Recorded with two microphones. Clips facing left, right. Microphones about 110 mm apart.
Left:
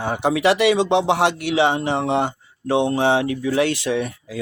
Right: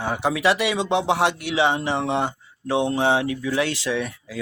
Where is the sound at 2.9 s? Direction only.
55° left (ahead or behind).